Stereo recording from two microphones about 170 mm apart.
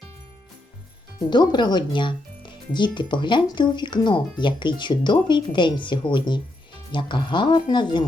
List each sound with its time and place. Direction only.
1.3 s speech: 25° left (ahead or behind)